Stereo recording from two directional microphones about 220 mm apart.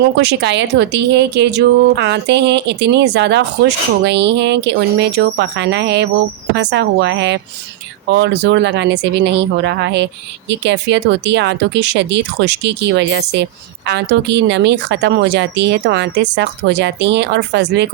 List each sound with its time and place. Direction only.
0.2 s speech: 50° right (ahead or behind)